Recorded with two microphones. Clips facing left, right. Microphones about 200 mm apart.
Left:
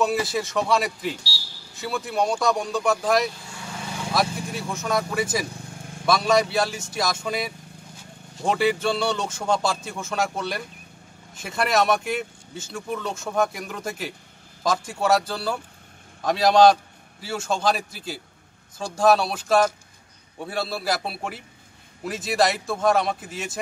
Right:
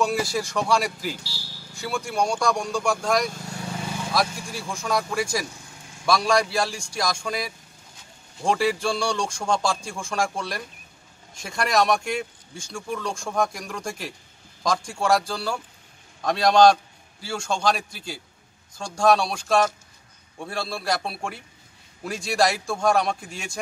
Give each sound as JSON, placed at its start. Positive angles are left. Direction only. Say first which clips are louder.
{"t": 0.0, "sound": "speech", "louder": "left 1 dB", "side_deg": 0}
{"t": 3.3, "sound": "vehicle", "louder": "right 1 dB", "side_deg": -45}
{"t": 4.1, "sound": "speech", "louder": "left 2 dB", "side_deg": 0}